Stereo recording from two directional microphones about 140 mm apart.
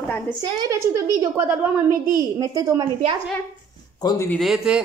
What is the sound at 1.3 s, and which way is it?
Speech, 15° right (ahead or behind).